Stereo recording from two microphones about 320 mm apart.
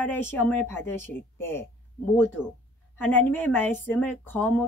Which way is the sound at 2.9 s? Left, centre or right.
Centre.